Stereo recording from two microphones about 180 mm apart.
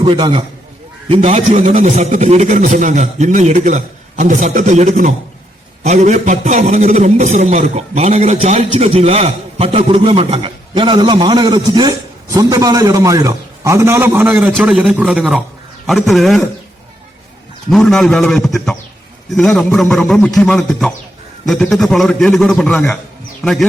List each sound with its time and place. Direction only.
0.0 s a man's voice: 25° right (ahead or behind); by 16.5 s centre (ahead or behind)
17.7 s a man's voice: 5° left (ahead or behind)